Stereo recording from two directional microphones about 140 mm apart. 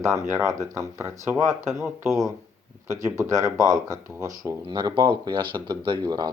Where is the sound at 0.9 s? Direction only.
20° right (ahead or behind).